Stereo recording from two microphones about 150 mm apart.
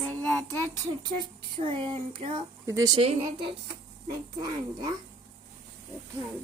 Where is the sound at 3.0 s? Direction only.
35° right (ahead or behind).